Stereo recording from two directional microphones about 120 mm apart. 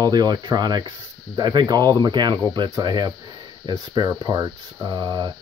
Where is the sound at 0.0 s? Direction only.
35° right (ahead or behind).